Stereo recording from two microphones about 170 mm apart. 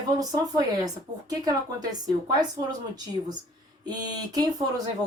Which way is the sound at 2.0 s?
25° right (ahead or behind).